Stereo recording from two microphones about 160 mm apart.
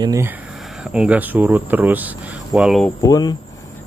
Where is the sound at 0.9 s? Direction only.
10° right (ahead or behind).